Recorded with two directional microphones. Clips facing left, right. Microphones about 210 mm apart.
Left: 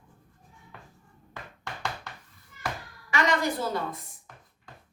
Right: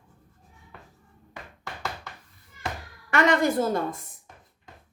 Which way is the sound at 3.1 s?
55° right (ahead or behind).